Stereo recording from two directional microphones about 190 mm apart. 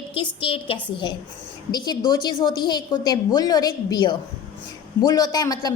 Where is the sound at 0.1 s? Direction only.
25° left (ahead or behind).